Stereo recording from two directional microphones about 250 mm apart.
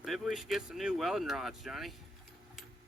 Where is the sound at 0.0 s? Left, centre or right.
Centre.